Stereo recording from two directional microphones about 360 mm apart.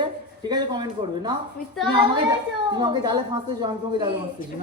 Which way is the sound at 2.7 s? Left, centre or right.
Centre.